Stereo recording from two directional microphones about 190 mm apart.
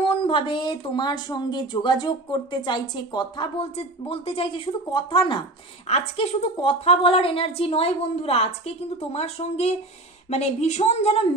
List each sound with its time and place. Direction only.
0.0 s a woman's voice: 30° left (ahead or behind)